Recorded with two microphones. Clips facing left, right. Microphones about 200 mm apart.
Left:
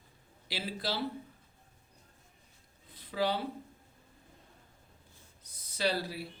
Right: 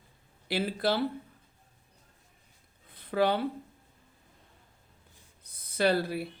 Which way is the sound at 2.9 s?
55° right (ahead or behind).